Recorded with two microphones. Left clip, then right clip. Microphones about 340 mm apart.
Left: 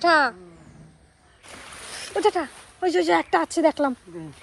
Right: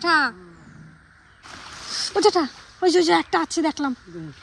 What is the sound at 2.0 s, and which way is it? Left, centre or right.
Speech, centre.